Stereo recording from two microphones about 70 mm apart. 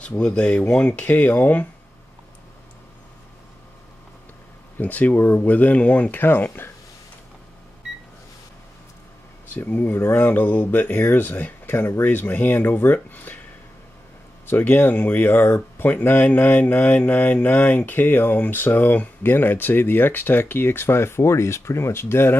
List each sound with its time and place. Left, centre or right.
0.2 s speech: centre
4.7 s speech: left
9.5 s speech: left
14.4 s speech: left